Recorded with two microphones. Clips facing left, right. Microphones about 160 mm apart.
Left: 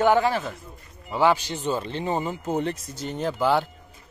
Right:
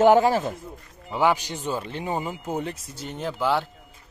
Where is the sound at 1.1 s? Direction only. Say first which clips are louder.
Left 1 dB; 15° right (ahead or behind).